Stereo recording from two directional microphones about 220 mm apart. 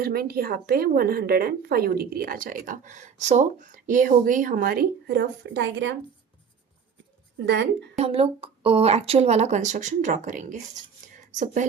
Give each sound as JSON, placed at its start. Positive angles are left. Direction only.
{"t": 0.0, "sound": "speech", "side_deg": -45}
{"t": 7.3, "sound": "speech", "side_deg": -50}
{"t": 7.9, "sound": "speech", "side_deg": -25}